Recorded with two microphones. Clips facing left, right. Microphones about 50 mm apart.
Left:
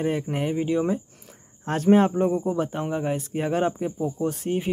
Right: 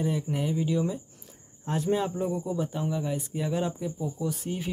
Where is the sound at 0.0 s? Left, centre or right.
Left.